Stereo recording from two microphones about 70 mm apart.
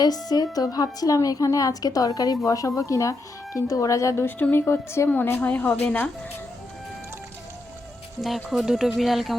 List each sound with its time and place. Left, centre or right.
0.0 s a woman's voice: left
4.2 s a woman's voice: left
5.0 s a woman's voice: left
8.4 s speech: centre